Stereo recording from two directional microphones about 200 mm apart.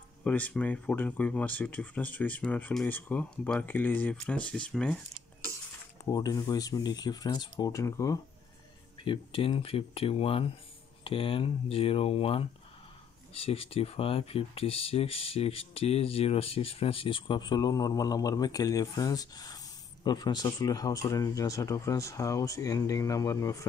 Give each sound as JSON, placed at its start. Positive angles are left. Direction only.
{"t": 0.2, "sound": "speech", "side_deg": 10}
{"t": 6.0, "sound": "speech", "side_deg": 20}